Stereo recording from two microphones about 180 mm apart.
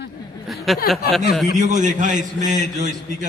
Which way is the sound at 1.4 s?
40° right (ahead or behind).